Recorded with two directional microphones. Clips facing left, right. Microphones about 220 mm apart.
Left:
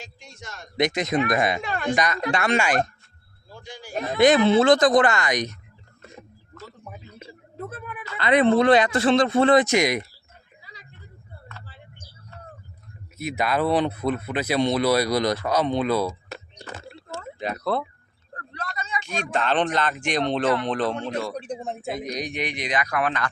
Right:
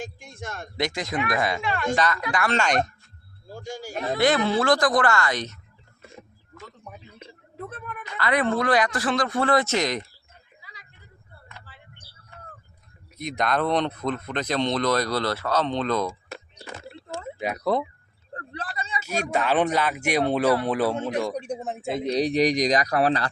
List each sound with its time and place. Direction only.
0.0 s speech: 50° right (ahead or behind)
0.8 s speech: 20° left (ahead or behind)
2.6 s speech: 5° left (ahead or behind)
3.5 s speech: 45° right (ahead or behind)
4.2 s speech: 20° left (ahead or behind)
6.8 s a sound: 5° left (ahead or behind)
8.2 s speech: 20° left (ahead or behind)
13.1 s speech: 5° left (ahead or behind)
16.6 s a sound: 10° right (ahead or behind)
18.3 s a sound: 30° right (ahead or behind)
18.9 s speech: 10° right (ahead or behind)
21.9 s speech: 30° right (ahead or behind)